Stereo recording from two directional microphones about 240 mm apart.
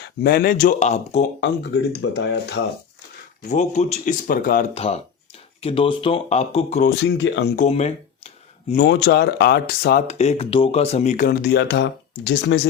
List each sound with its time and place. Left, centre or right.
0.2 s speech: left
1.4 s speech: left
3.5 s speech: left
4.7 s speech: left
7.0 s speech: left
7.6 s speech: left
8.8 s speech: left
10.1 s speech: left